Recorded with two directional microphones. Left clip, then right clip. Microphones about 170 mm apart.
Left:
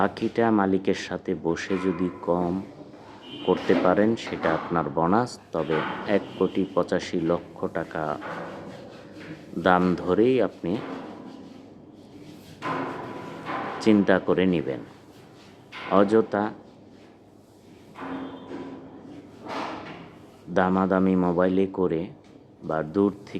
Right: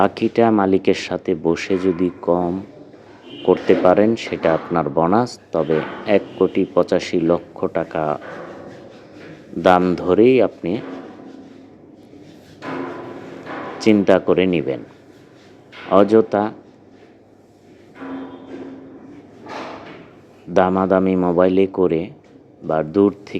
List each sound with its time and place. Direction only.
0.0 s speech: 20° right (ahead or behind)
9.6 s speech: 25° right (ahead or behind)
13.7 s speech: 20° right (ahead or behind)
15.9 s speech: 20° right (ahead or behind)
20.5 s speech: 20° right (ahead or behind)